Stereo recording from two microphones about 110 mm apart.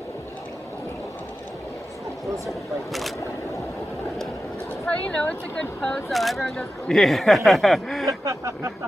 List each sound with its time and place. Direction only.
4.8 s speech: 10° left (ahead or behind)
8.1 s speech: 30° right (ahead or behind)